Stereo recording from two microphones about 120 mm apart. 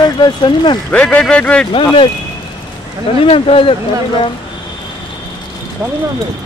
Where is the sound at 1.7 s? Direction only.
45° left (ahead or behind).